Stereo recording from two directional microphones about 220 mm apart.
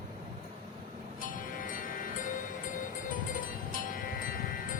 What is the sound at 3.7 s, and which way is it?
Music, 40° left (ahead or behind).